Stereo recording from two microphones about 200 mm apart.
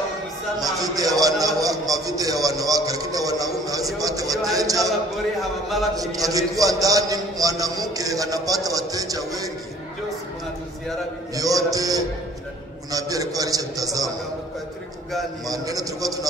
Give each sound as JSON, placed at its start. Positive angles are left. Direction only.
{"t": 0.9, "sound": "a man's voice", "side_deg": -20}
{"t": 5.4, "sound": "speech", "side_deg": 0}
{"t": 5.9, "sound": "a man's voice", "side_deg": -15}
{"t": 11.3, "sound": "a man's voice", "side_deg": -15}
{"t": 12.9, "sound": "a sound", "side_deg": -15}
{"t": 15.4, "sound": "a man's voice", "side_deg": -15}